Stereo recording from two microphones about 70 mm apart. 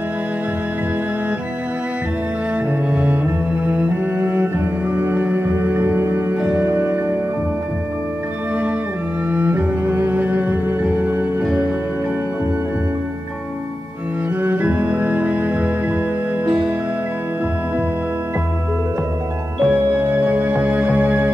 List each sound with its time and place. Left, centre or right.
2.9 s music: right
3.6 s cello: right
4.9 s music: right
9.3 s music: right
14.4 s organ: right
19.6 s music: right